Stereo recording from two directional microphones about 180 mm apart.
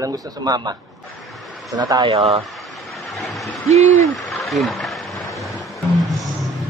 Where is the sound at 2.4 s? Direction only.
Centre (ahead or behind).